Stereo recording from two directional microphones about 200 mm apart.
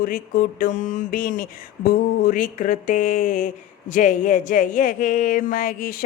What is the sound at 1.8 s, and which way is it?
Speech, 45° left (ahead or behind).